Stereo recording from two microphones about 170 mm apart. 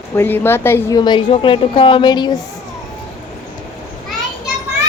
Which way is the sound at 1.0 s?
25° left (ahead or behind).